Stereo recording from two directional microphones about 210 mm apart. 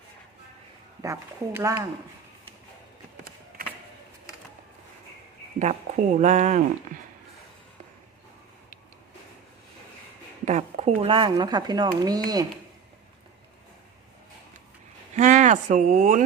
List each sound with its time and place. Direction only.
1.0 s speech: 15° right (ahead or behind)
5.5 s speech: 35° right (ahead or behind)
10.4 s speech: 30° right (ahead or behind)
15.1 s speech: 35° right (ahead or behind)